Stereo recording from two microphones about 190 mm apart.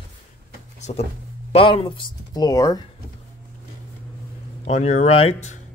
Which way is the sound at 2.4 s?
20° left (ahead or behind).